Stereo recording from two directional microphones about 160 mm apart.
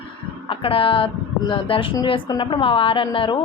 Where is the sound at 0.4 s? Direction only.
35° left (ahead or behind).